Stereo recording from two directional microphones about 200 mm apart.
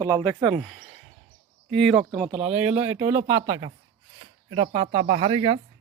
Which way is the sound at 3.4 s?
25° right (ahead or behind).